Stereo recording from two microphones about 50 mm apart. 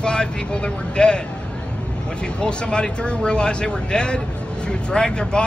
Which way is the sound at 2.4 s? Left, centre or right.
Centre.